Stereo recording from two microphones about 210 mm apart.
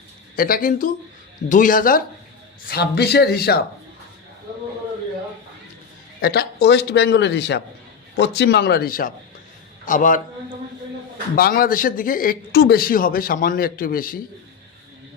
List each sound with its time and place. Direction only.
0.3 s a man's voice: 45° left (ahead or behind)
6.2 s a man's voice: 50° left (ahead or behind)
11.3 s a man's voice: 45° left (ahead or behind)